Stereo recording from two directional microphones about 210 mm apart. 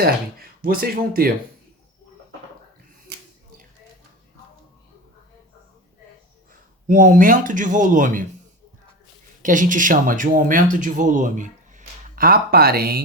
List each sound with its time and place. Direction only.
0.0 s speech: 45° right (ahead or behind)
6.8 s speech: 40° right (ahead or behind)
9.4 s speech: 40° right (ahead or behind)